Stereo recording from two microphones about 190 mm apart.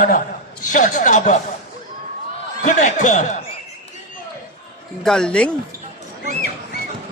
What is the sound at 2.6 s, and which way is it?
Speech, 40° left (ahead or behind).